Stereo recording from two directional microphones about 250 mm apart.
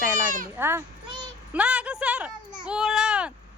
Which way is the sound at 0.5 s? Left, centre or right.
Centre.